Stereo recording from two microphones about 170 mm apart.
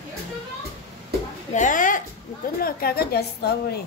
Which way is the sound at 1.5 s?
50° left (ahead or behind).